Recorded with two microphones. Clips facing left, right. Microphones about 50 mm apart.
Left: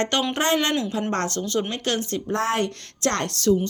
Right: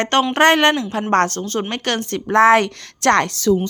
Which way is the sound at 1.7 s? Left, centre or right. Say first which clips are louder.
Right 4 dB; right.